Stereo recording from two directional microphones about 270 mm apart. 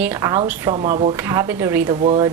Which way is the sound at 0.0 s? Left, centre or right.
Centre.